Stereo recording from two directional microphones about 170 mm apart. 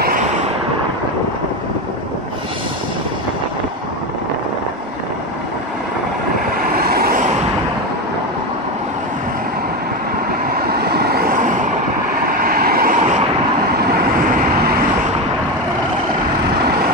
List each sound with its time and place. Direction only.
6.7 s vehicle: 65° right (ahead or behind)
10.5 s vehicle: 65° right (ahead or behind); by 11.7 s 45° right (ahead or behind)
12.3 s vehicle: 60° right (ahead or behind)